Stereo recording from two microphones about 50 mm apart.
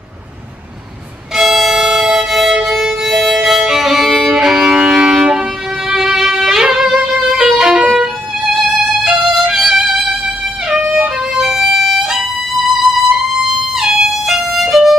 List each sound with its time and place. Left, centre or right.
1.3 s violin: centre
4.7 s music: centre
5.9 s violin: centre
6.1 s violin: centre
7.0 s music: centre
7.4 s violin: centre
11.0 s violin: centre
12.8 s music: centre